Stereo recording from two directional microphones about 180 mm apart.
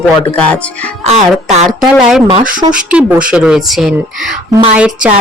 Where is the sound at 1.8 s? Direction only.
5° right (ahead or behind).